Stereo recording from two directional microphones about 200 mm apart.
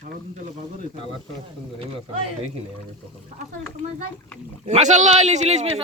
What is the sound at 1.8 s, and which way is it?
Speech, 30° right (ahead or behind).